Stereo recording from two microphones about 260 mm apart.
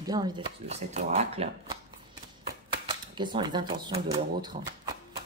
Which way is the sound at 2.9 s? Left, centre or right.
Centre.